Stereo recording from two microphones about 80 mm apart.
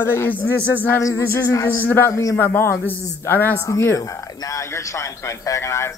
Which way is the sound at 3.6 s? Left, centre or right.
Left.